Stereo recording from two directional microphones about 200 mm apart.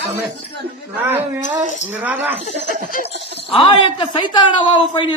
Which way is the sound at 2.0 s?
10° right (ahead or behind).